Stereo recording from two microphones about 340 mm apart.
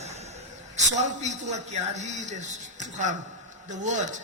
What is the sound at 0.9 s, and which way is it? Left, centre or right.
A man's voice, right.